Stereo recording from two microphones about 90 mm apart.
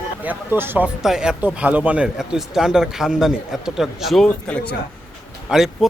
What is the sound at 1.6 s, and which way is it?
Speech, 15° right (ahead or behind).